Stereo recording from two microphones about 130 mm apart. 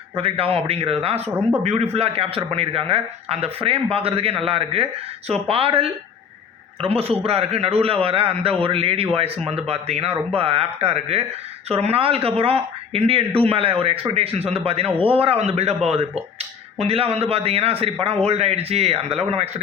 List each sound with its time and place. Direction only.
0.2 s a man's voice: 45° right (ahead or behind)